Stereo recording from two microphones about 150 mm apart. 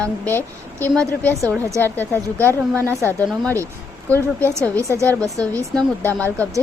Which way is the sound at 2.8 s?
20° right (ahead or behind).